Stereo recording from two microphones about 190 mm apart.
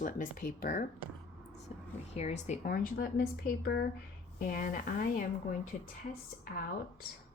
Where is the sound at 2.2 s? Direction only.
35° left (ahead or behind).